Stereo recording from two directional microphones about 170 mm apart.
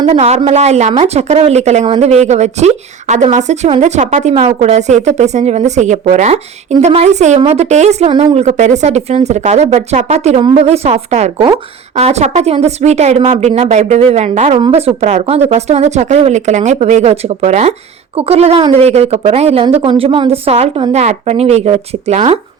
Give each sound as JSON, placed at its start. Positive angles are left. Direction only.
{"t": 0.0, "sound": "a woman's voice", "side_deg": -35}